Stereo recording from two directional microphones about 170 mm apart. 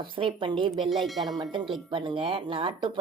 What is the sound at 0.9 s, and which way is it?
Speech, centre (ahead or behind).